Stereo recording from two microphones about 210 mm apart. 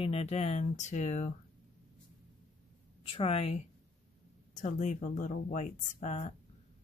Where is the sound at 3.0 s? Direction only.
25° left (ahead or behind).